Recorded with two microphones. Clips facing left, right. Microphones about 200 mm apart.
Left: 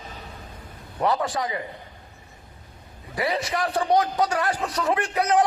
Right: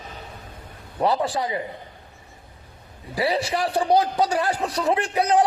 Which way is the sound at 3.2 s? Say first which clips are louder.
Right 2 dB; 30° right (ahead or behind).